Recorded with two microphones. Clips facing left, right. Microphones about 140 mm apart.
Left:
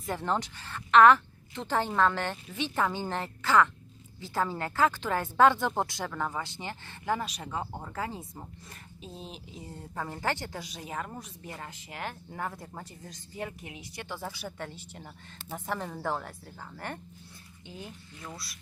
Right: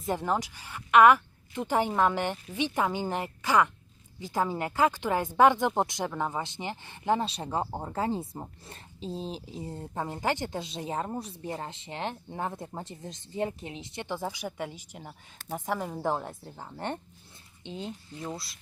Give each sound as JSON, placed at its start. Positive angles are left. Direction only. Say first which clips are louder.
{"t": 0.0, "sound": "a woman's voice", "louder": "right 2 dB", "side_deg": -15}